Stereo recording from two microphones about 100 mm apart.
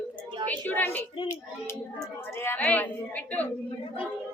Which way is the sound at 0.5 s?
20° left (ahead or behind).